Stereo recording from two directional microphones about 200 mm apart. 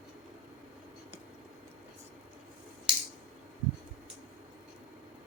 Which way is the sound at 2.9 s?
25° right (ahead or behind).